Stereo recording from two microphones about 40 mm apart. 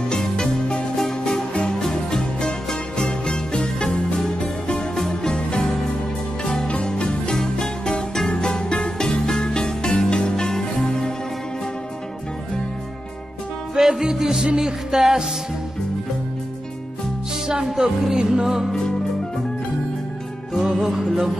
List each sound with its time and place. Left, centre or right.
0.1 s music: centre
6.8 s music: left
13.7 s music: centre
17.6 s music: centre
20.5 s music: centre